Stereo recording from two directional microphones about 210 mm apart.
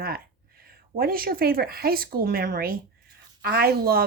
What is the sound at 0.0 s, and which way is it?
Speech, 45° right (ahead or behind).